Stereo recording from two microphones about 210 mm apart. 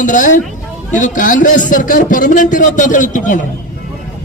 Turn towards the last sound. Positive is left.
turn(degrees=40)  # may be behind; listen again after turning